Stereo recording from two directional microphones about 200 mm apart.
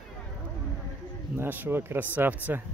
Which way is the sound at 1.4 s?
10° right (ahead or behind).